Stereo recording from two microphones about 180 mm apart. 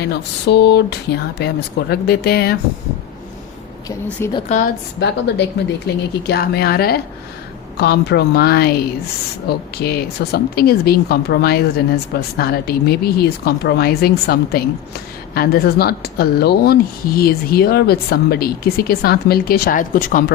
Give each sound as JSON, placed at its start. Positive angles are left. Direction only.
{"t": 0.0, "sound": "a sound", "side_deg": 70}
{"t": 1.4, "sound": "speech", "side_deg": 65}
{"t": 3.8, "sound": "a woman's voice", "side_deg": 20}
{"t": 4.4, "sound": "a woman's voice", "side_deg": 45}
{"t": 4.9, "sound": "speech", "side_deg": 70}